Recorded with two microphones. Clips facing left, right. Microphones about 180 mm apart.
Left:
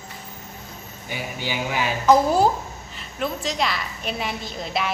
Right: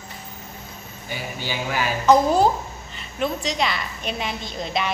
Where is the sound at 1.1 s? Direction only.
15° left (ahead or behind).